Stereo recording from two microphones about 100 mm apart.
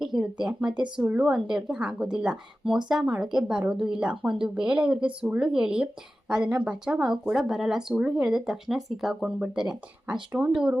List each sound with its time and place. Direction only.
0.0 s speech: 5° right (ahead or behind)